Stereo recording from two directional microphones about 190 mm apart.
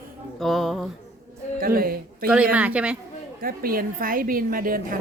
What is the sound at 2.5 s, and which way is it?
Speech, 5° right (ahead or behind).